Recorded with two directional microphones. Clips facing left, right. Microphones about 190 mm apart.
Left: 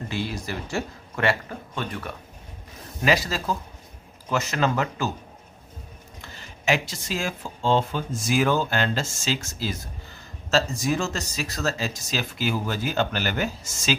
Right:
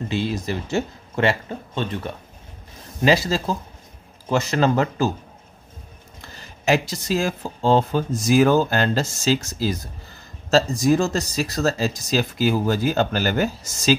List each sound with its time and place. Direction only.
0.1 s speech: 25° right (ahead or behind)
6.6 s speech: 40° right (ahead or behind)